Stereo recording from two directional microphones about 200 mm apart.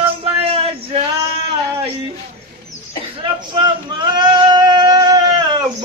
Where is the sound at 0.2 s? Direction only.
30° right (ahead or behind).